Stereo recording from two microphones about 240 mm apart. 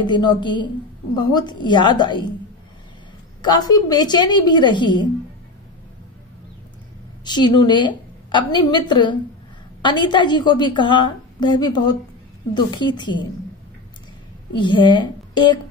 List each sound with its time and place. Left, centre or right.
0.0 s a woman's voice: centre
3.4 s a woman's voice: centre
7.2 s a woman's voice: centre
14.5 s a woman's voice: centre